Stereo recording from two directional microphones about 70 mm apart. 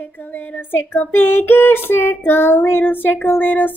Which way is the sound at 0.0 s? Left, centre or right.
Left.